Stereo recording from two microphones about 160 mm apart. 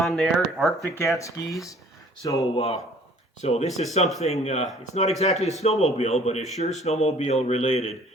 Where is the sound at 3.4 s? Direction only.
40° left (ahead or behind).